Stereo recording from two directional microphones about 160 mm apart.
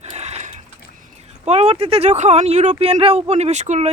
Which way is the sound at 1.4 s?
40° right (ahead or behind).